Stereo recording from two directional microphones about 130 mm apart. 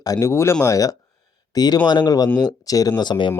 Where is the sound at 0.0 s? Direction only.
25° left (ahead or behind).